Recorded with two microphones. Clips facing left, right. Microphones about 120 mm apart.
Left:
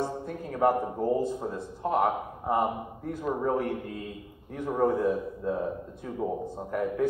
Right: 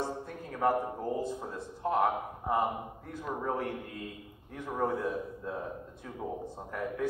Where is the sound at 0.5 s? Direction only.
20° left (ahead or behind).